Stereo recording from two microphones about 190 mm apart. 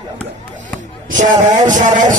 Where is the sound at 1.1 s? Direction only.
40° right (ahead or behind).